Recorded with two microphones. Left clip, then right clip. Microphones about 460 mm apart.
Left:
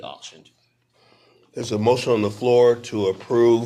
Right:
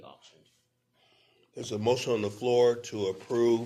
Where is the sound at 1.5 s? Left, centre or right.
Centre.